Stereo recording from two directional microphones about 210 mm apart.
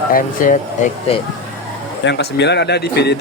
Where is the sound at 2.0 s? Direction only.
55° left (ahead or behind).